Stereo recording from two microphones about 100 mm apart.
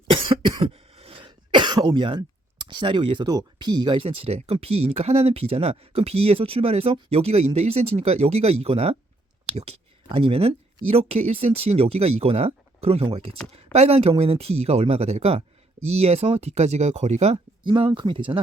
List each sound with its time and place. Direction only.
0.1 s cough: 55° right (ahead or behind)
0.7 s throat clearing: 75° right (ahead or behind)
1.2 s speech: 50° right (ahead or behind)
3.2 s speech: 45° right (ahead or behind); by 10.5 s 75° right (ahead or behind)
10.8 s speech: 85° right
17.7 s speech: 55° right (ahead or behind)